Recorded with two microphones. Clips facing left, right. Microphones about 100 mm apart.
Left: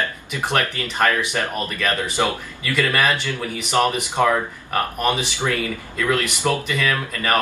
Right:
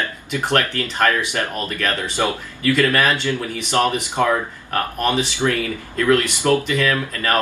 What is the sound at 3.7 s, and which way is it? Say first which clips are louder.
Speech: even; 15° left (ahead or behind).